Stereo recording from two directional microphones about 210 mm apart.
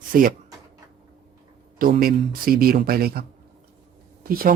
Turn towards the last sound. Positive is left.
turn(degrees=-45)  # may be behind; listen again after turning